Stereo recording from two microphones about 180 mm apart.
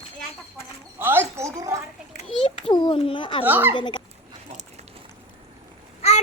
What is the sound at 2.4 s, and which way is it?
Speech, 30° left (ahead or behind).